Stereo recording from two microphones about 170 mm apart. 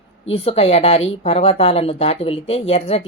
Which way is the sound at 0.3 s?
35° left (ahead or behind).